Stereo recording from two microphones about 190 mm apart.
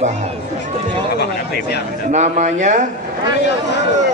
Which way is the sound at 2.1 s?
35° right (ahead or behind).